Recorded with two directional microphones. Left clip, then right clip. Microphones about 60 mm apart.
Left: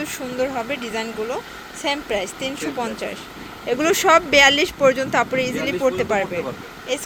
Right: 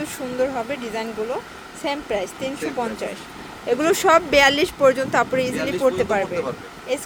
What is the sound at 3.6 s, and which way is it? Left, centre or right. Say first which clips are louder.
Speech: even; right.